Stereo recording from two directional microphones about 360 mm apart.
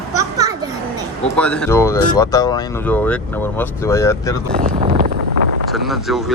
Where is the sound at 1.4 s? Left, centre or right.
Centre.